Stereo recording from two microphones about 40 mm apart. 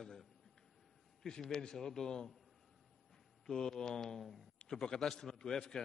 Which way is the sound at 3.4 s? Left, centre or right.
Centre.